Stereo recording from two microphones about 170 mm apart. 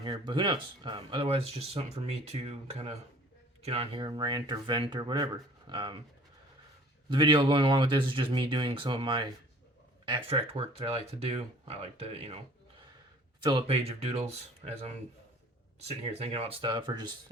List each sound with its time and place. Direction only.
0.0 s speech: 25° right (ahead or behind)
7.1 s speech: 30° right (ahead or behind)
13.4 s speech: 30° right (ahead or behind)